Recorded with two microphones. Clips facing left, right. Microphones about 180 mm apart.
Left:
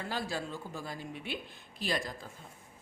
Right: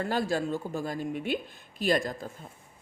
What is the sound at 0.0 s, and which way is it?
A woman's voice, 50° right (ahead or behind).